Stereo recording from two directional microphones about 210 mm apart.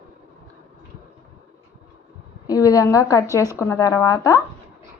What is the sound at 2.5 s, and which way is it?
A woman's voice, 15° left (ahead or behind).